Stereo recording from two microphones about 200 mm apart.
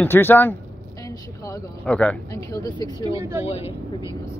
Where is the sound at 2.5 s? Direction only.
20° left (ahead or behind).